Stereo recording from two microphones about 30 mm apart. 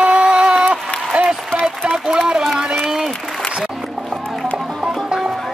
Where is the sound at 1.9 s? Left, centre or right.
Centre.